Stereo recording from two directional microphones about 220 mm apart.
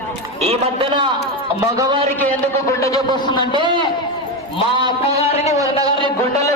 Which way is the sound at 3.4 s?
20° right (ahead or behind).